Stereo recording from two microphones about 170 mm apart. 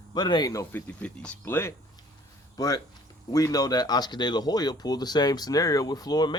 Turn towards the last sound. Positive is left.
turn(degrees=25)  # may be behind; listen again after turning